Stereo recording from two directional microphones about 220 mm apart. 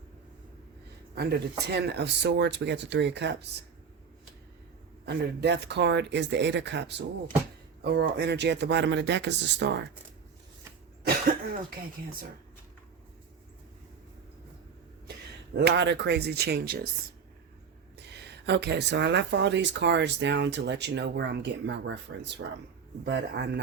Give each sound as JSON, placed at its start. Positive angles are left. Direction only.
{"t": 1.1, "sound": "speech", "side_deg": -45}
{"t": 5.0, "sound": "speech", "side_deg": -50}
{"t": 15.5, "sound": "speech", "side_deg": -50}
{"t": 17.9, "sound": "speech", "side_deg": -50}